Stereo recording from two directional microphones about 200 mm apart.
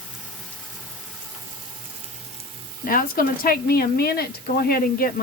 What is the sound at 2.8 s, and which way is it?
Speech, 45° left (ahead or behind).